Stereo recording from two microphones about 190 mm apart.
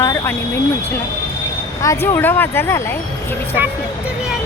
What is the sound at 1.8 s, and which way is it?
Speech, 15° left (ahead or behind).